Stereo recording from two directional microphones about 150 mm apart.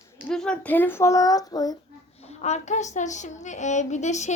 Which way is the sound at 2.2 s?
45° left (ahead or behind).